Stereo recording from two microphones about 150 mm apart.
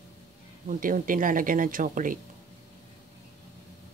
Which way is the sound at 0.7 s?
65° right (ahead or behind).